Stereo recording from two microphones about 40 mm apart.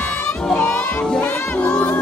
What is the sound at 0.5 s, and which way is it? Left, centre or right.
Music, left.